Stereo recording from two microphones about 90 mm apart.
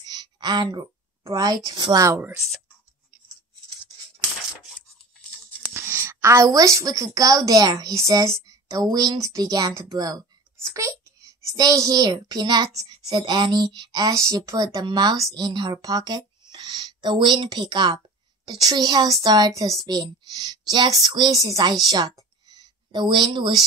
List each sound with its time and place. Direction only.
0.0 s a sound: 55° right (ahead or behind)
1.2 s speech: 45° right (ahead or behind)
2.0 s speech: 30° right (ahead or behind)
5.7 s a woman's voice: 25° right (ahead or behind); by 7.9 s 45° right (ahead or behind)
7.9 s speech: 35° right (ahead or behind)
10.7 s a child's voice: 35° right (ahead or behind)
19.9 s speech: 50° right (ahead or behind)